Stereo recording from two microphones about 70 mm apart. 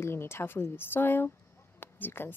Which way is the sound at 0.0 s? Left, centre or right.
Left.